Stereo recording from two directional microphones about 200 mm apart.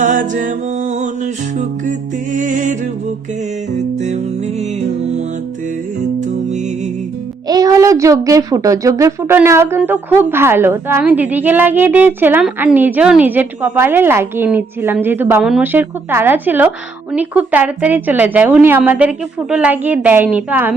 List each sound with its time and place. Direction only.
0.0 s music: 40° right (ahead or behind)
3.8 s music: 35° right (ahead or behind)
6.1 s music: 35° right (ahead or behind)
7.4 s speech: 20° right (ahead or behind)